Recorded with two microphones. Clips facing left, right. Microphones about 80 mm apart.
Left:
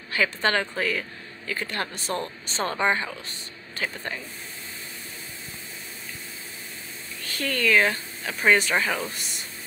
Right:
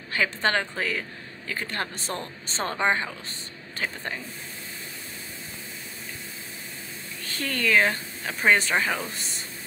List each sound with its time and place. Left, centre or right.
0.1 s a woman's voice: right
7.2 s speech: right